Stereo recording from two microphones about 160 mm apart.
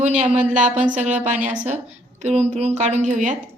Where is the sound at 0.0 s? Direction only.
45° right (ahead or behind).